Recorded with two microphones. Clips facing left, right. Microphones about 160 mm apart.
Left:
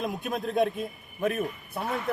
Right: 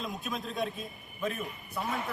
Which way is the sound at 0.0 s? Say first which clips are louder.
Left 6 dB; 55° left (ahead or behind).